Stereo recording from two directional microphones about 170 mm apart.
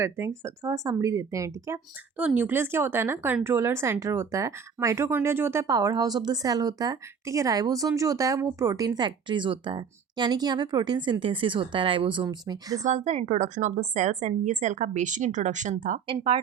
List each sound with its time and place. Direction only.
0.0 s speech: 15° right (ahead or behind)
12.8 s a woman's voice: 45° right (ahead or behind)
16.0 s speech: 35° right (ahead or behind)